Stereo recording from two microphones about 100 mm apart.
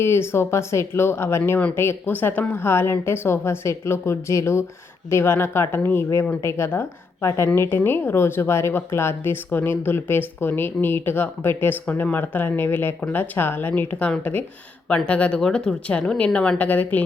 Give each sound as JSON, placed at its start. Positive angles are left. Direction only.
{"t": 0.0, "sound": "a woman's voice", "side_deg": 25}